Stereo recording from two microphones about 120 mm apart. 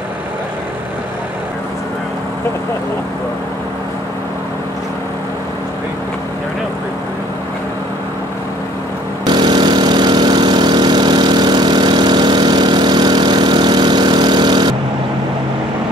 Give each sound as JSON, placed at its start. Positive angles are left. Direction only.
{"t": 9.2, "sound": "lawn mower", "side_deg": -40}